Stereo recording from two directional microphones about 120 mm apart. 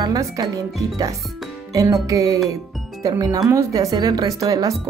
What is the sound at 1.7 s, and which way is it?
Music, 25° right (ahead or behind).